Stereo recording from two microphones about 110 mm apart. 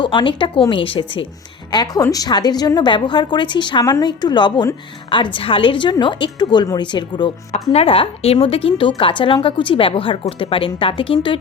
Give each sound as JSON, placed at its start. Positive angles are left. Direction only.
{"t": 0.0, "sound": "a woman's voice", "side_deg": 45}
{"t": 1.7, "sound": "a woman's voice", "side_deg": 35}
{"t": 7.7, "sound": "a woman's voice", "side_deg": 65}